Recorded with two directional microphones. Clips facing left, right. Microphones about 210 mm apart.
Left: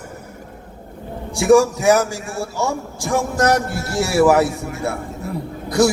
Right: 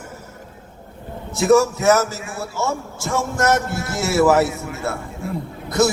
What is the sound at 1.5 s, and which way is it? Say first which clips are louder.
A man's voice: left 2 dB; 15° left (ahead or behind).